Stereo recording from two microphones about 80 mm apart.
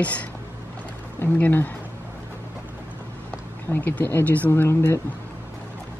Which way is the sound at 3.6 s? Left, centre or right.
Left.